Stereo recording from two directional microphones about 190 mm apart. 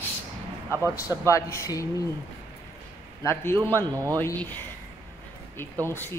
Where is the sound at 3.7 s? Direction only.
20° right (ahead or behind).